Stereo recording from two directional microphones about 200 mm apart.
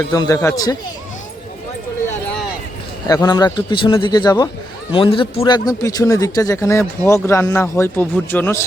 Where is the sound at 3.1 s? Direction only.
20° left (ahead or behind).